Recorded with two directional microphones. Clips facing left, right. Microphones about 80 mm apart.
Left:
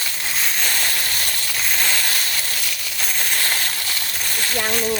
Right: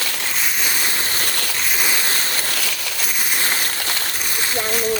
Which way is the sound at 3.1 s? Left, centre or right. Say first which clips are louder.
Even; centre.